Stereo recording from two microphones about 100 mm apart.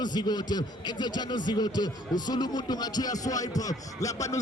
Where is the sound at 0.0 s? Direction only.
45° left (ahead or behind).